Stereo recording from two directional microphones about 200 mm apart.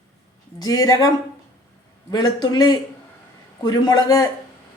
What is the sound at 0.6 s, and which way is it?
Speech, 15° left (ahead or behind).